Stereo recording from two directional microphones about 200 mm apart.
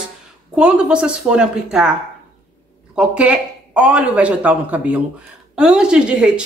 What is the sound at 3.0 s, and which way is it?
Speech, 5° right (ahead or behind).